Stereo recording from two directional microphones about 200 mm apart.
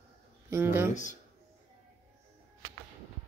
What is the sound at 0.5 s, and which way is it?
Speech, 10° right (ahead or behind).